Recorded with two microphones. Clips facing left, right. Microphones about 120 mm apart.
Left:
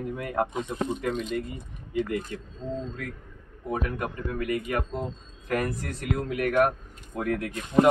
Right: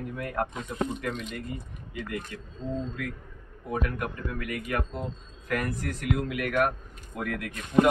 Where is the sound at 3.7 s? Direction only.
30° left (ahead or behind).